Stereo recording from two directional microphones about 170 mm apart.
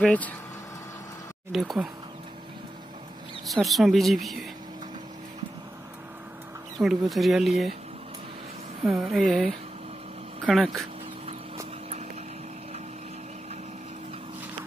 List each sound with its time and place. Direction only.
0.0 s speech: 10° left (ahead or behind)
1.5 s speech: centre (ahead or behind)
3.4 s speech: centre (ahead or behind)
6.8 s speech: centre (ahead or behind)
8.8 s speech: centre (ahead or behind)